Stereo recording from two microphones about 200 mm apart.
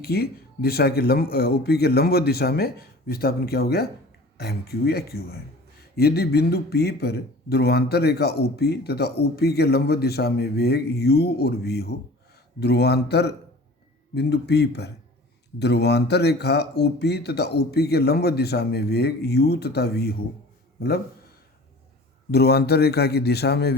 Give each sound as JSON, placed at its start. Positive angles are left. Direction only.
{"t": 0.0, "sound": "a man's voice", "side_deg": 50}
{"t": 22.3, "sound": "speech", "side_deg": 50}